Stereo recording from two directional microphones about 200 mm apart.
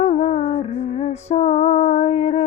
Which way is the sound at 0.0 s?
35° left (ahead or behind).